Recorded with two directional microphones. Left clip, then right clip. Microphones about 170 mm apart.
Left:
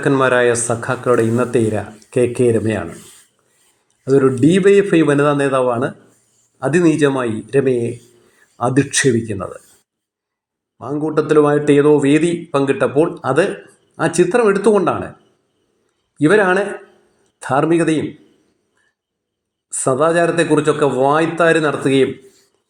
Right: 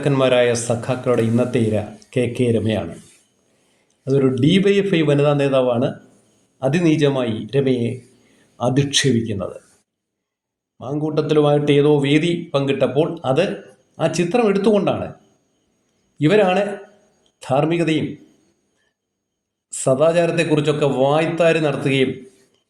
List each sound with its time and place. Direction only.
0.0 s a man's voice: 15° left (ahead or behind)
4.0 s a man's voice: 15° left (ahead or behind)
10.8 s a man's voice: 15° left (ahead or behind)
16.1 s a man's voice: 15° left (ahead or behind)
19.8 s a man's voice: 10° left (ahead or behind)